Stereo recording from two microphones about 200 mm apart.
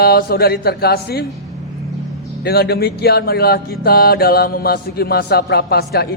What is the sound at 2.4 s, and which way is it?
Mantra, 50° left (ahead or behind).